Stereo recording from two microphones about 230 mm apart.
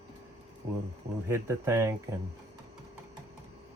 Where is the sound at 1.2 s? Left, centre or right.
Centre.